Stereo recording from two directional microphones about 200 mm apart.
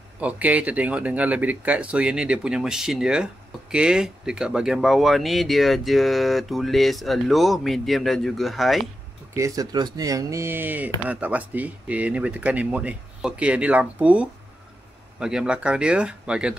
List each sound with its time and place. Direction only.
0.2 s speech: 5° right (ahead or behind)
9.3 s speech: 15° right (ahead or behind)